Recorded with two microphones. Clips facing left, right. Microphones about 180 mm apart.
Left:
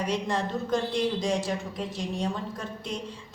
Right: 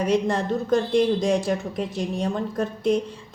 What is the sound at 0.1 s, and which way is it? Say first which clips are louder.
A woman's voice: right 7 dB; 55° right (ahead or behind).